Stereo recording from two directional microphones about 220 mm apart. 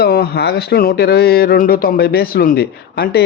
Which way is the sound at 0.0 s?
45° left (ahead or behind).